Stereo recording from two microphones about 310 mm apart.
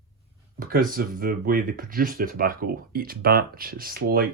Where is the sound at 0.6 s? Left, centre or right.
Right.